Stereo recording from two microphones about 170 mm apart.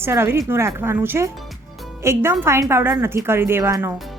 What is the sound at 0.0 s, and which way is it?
Speech, 15° right (ahead or behind).